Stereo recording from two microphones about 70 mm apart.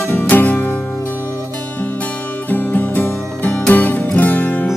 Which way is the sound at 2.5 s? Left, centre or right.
Left.